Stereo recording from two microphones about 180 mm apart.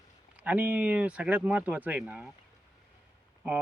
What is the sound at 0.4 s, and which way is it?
Speech, 10° right (ahead or behind).